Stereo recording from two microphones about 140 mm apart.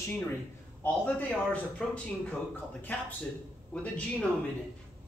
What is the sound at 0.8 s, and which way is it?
Speech, 10° left (ahead or behind).